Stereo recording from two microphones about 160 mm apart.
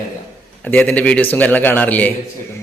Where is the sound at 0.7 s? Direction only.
10° left (ahead or behind).